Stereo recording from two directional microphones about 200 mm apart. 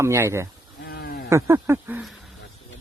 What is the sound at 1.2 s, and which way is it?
Speech, 15° right (ahead or behind).